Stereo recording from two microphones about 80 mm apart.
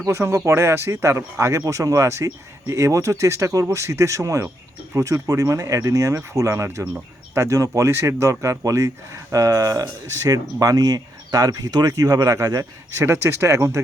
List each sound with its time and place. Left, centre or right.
0.1 s speech: right
13.1 s speech: right